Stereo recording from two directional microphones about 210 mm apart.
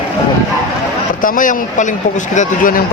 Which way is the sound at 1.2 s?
40° left (ahead or behind).